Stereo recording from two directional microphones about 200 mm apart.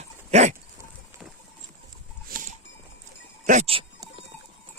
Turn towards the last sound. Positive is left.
turn(degrees=-35)  # may be behind; listen again after turning